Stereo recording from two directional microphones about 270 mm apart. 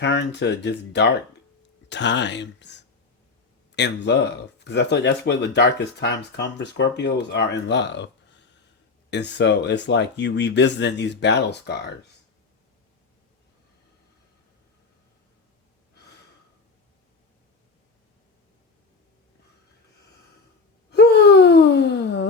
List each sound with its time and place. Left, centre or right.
0.0 s speech: left
20.9 s wail: left